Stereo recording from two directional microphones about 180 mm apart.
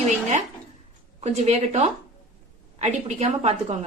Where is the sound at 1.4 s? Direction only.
40° right (ahead or behind).